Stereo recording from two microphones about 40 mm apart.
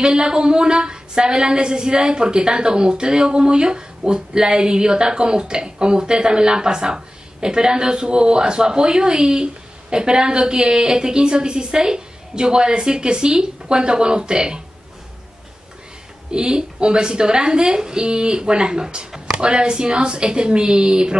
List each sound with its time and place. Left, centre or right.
0.0 s a woman's voice: right
16.3 s a woman's voice: right